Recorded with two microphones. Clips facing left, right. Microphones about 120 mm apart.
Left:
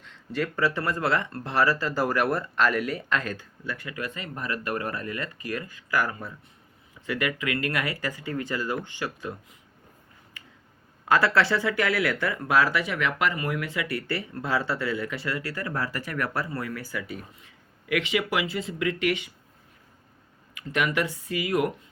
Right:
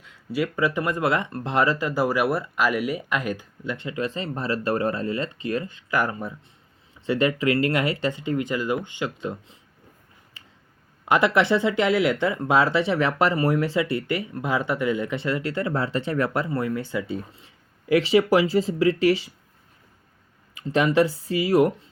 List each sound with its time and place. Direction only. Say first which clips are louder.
0.0 s speech: right 3 dB; 10° right (ahead or behind)
10.4 s a sound: left 2 dB; 30° right (ahead or behind)
11.0 s speech: right 2 dB; 20° right (ahead or behind)
20.6 s speech: right 7 dB; 30° right (ahead or behind)